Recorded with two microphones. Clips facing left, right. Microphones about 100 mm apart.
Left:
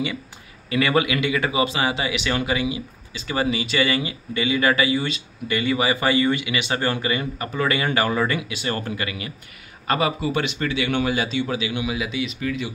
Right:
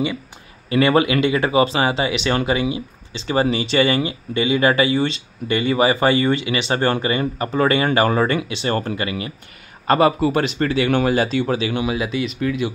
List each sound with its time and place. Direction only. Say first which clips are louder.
0.7 s speech: right 5 dB; 30° right (ahead or behind)
9.8 s speech: right 7 dB; 45° right (ahead or behind)